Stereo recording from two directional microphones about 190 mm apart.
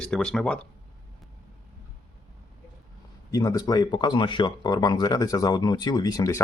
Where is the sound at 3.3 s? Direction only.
20° left (ahead or behind).